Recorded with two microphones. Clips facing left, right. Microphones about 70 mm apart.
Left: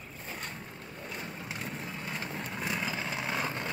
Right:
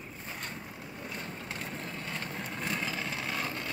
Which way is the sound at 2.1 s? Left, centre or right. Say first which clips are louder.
Left 1 dB; centre.